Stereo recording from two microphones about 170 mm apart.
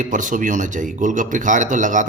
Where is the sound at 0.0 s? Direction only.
50° right (ahead or behind).